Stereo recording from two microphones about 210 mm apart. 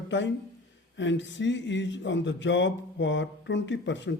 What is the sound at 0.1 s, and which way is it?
Speech, 60° left (ahead or behind).